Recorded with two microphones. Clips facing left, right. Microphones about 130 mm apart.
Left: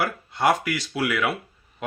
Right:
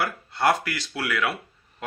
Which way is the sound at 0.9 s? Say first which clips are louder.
Left 2 dB; 15° left (ahead or behind).